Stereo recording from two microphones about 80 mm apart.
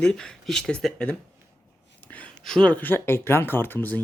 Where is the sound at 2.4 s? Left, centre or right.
Centre.